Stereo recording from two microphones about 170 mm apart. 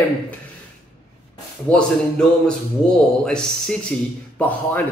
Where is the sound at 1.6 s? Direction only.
5° left (ahead or behind).